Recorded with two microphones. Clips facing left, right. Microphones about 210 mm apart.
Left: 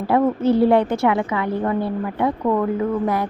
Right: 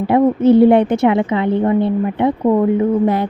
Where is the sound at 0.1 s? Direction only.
20° right (ahead or behind).